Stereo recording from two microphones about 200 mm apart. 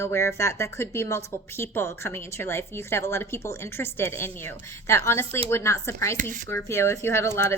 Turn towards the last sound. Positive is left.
turn(degrees=15)  # may be behind; listen again after turning